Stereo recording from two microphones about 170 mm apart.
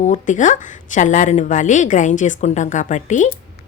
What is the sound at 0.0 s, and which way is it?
A woman's voice, 45° left (ahead or behind).